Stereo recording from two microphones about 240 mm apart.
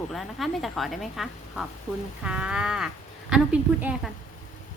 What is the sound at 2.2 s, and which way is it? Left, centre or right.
Speech, centre.